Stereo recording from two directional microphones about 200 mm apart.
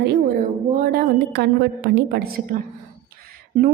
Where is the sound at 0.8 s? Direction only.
50° right (ahead or behind).